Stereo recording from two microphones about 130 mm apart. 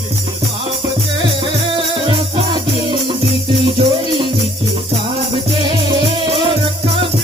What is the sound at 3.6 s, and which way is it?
Music, 40° right (ahead or behind).